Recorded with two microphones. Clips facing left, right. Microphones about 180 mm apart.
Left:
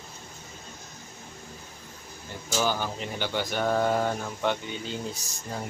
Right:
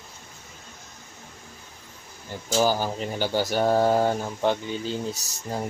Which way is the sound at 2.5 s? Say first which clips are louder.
Right 5 dB; 35° right (ahead or behind).